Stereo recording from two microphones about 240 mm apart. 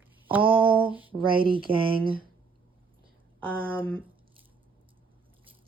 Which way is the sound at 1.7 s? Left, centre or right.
Right.